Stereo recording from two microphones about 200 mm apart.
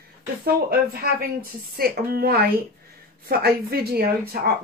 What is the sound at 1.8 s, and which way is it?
Speech, 50° right (ahead or behind).